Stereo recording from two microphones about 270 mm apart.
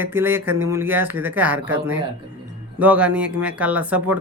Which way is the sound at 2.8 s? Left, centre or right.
Centre.